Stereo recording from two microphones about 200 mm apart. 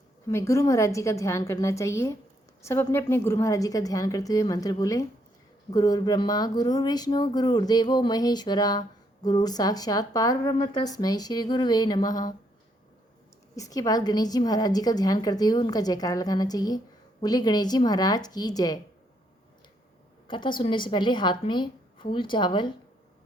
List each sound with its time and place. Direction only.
0.3 s a woman's voice: 15° left (ahead or behind)
13.6 s a woman's voice: 20° left (ahead or behind)
20.2 s a woman's voice: 25° left (ahead or behind)